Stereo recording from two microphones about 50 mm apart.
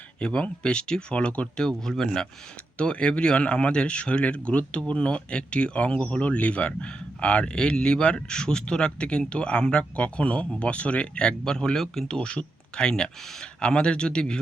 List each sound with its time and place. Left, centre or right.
0.2 s speech: left
2.7 s speech: left